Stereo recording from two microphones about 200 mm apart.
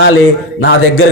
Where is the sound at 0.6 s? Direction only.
80° left.